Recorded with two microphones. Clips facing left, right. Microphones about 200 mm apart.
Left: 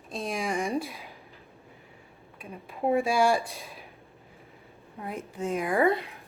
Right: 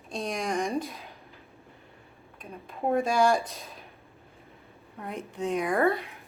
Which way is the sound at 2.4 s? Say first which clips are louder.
Left 2 dB; 5° left (ahead or behind).